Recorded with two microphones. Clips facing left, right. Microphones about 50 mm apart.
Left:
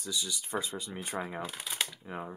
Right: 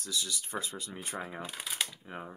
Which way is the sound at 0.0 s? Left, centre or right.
Centre.